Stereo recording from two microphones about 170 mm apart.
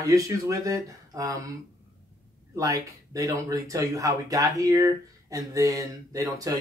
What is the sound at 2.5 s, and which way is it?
Speech, 20° right (ahead or behind).